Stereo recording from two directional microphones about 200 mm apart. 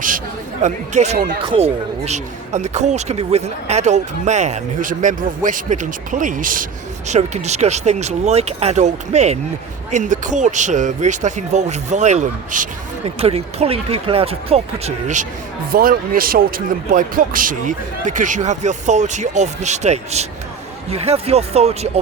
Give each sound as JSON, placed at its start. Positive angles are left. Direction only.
{"t": 0.6, "sound": "speech", "side_deg": -35}